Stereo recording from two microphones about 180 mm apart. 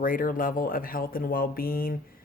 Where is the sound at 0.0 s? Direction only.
50° left (ahead or behind).